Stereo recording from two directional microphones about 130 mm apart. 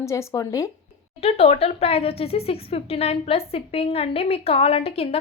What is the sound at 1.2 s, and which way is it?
Speech, 50° left (ahead or behind).